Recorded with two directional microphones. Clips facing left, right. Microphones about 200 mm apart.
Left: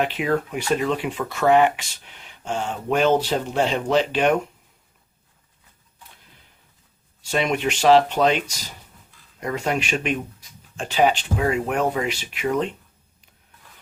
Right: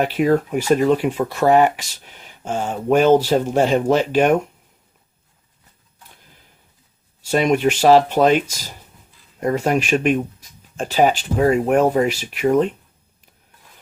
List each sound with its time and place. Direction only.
0.0 s speech: 45° right (ahead or behind)
7.3 s speech: 45° right (ahead or behind)
9.4 s speech: 40° right (ahead or behind)